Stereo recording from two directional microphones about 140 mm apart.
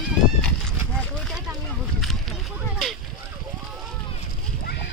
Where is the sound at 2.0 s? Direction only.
Centre (ahead or behind).